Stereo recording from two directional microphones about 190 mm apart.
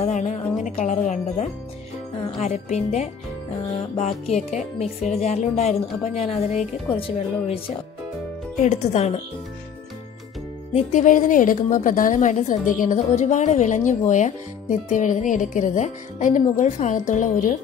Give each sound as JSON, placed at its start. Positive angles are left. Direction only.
{"t": 0.0, "sound": "a woman's voice", "side_deg": 35}
{"t": 10.7, "sound": "a woman's voice", "side_deg": 40}